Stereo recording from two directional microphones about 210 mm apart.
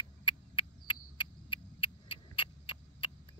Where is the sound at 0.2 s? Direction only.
25° left (ahead or behind).